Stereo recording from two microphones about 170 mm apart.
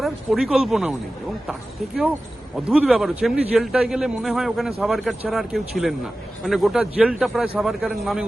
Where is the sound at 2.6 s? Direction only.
5° right (ahead or behind).